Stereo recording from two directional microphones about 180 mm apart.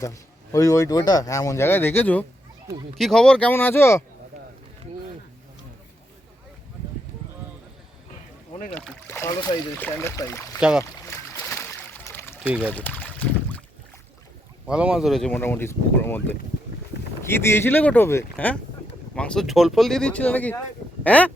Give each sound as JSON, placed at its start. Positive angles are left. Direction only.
{"t": 0.0, "sound": "speech", "side_deg": 15}
{"t": 8.7, "sound": "speech", "side_deg": 10}
{"t": 10.6, "sound": "speech", "side_deg": -5}
{"t": 11.0, "sound": "a sound", "side_deg": 15}
{"t": 12.4, "sound": "speech", "side_deg": -5}
{"t": 12.6, "sound": "boat", "side_deg": 10}
{"t": 14.7, "sound": "speech", "side_deg": -5}